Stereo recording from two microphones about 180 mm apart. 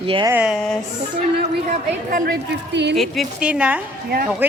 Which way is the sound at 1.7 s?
50° right (ahead or behind).